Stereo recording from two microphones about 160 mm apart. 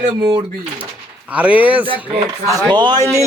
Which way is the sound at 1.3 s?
10° right (ahead or behind).